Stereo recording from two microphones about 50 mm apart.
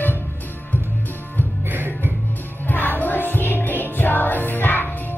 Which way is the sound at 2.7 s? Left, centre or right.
Left.